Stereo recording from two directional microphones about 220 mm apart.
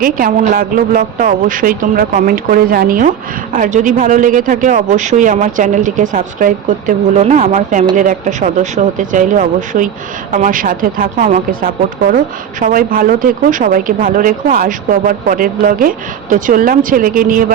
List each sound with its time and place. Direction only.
0.0 s speech: 35° right (ahead or behind)